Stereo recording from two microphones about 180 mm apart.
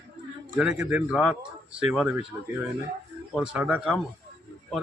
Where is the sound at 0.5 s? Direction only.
5° right (ahead or behind).